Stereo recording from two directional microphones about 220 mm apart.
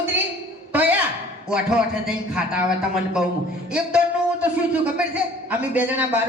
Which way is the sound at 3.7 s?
5° right (ahead or behind).